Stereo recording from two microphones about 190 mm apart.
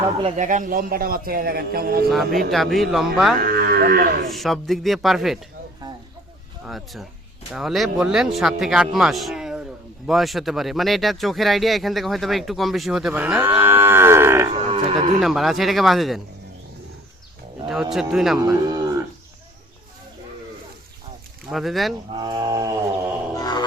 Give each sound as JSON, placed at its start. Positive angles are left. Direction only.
{"t": 0.2, "sound": "a man's voice", "side_deg": -35}
{"t": 2.5, "sound": "speech", "side_deg": 0}
{"t": 3.4, "sound": "a man's voice", "side_deg": -55}
{"t": 4.3, "sound": "speech", "side_deg": 0}
{"t": 6.7, "sound": "speech", "side_deg": 0}
{"t": 14.5, "sound": "cattle", "side_deg": -30}
{"t": 15.2, "sound": "speech", "side_deg": 0}
{"t": 17.7, "sound": "speech", "side_deg": 0}
{"t": 18.3, "sound": "speech", "side_deg": -20}
{"t": 21.5, "sound": "speech", "side_deg": 0}
{"t": 22.1, "sound": "livestock", "side_deg": -25}
{"t": 23.3, "sound": "a sound", "side_deg": 20}